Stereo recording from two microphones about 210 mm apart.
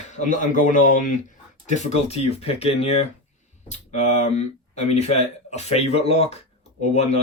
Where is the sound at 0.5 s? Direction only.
40° left (ahead or behind).